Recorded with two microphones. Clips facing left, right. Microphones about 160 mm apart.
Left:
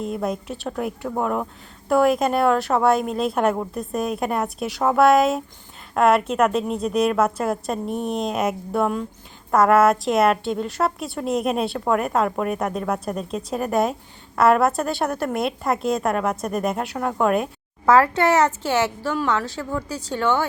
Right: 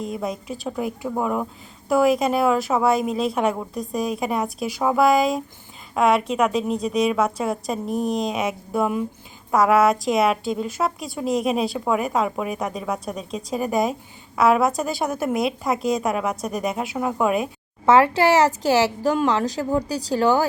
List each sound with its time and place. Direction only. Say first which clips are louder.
0.0 s a woman's voice: left 2 dB; centre (ahead or behind)
17.8 s a woman's voice: right 1 dB; 25° right (ahead or behind)
19.5 s a woman's voice: right 5 dB; 35° right (ahead or behind)